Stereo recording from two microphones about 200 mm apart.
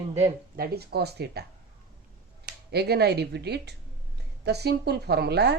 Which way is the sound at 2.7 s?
55° right (ahead or behind).